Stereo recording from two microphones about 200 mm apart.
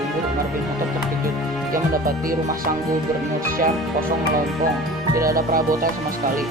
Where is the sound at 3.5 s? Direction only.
45° right (ahead or behind).